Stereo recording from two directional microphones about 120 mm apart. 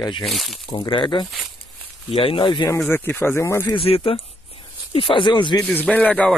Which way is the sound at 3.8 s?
50° left (ahead or behind).